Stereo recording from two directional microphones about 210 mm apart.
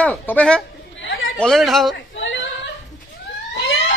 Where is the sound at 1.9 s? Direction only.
60° left (ahead or behind).